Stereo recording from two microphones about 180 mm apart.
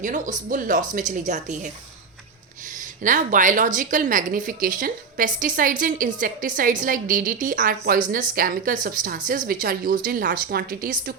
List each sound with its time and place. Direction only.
0.0 s a woman's voice: 45° right (ahead or behind)
3.0 s a woman's voice: 45° right (ahead or behind)